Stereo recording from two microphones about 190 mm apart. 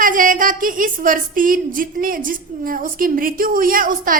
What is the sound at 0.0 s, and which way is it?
A woman's voice, 45° right (ahead or behind).